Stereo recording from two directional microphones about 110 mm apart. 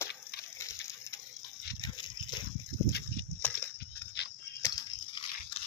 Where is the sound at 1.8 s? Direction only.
40° left (ahead or behind).